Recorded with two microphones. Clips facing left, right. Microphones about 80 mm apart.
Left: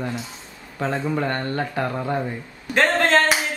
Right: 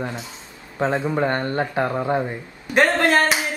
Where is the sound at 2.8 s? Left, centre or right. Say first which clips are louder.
Right 1 dB; centre.